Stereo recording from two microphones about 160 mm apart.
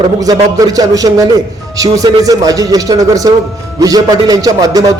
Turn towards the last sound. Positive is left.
turn(degrees=-20)  # may be behind; listen again after turning